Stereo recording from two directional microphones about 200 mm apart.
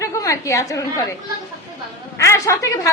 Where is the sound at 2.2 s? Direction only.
15° left (ahead or behind).